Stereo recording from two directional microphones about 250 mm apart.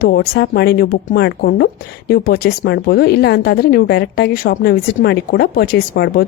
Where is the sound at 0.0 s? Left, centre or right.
Left.